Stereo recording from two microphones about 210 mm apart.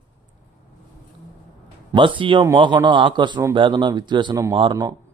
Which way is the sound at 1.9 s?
25° right (ahead or behind).